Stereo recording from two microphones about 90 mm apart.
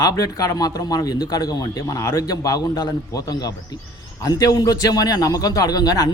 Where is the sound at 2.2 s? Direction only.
45° left (ahead or behind).